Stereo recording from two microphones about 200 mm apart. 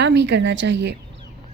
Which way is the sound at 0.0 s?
60° right (ahead or behind).